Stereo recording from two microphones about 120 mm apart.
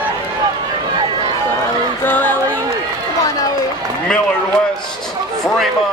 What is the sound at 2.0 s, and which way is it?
Music, 15° left (ahead or behind).